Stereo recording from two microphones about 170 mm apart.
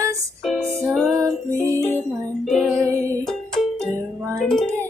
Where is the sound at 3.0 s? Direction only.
5° left (ahead or behind).